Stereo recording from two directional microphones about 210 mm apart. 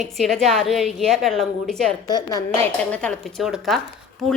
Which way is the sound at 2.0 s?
20° left (ahead or behind).